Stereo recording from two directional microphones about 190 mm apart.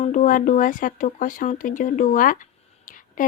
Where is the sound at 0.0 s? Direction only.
40° left (ahead or behind).